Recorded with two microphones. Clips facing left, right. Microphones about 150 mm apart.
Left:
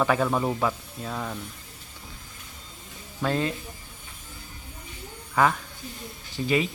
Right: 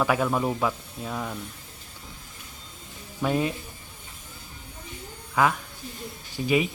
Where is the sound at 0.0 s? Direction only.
5° right (ahead or behind).